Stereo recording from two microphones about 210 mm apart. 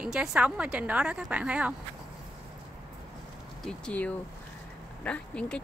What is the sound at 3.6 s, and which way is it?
Speech, 5° left (ahead or behind).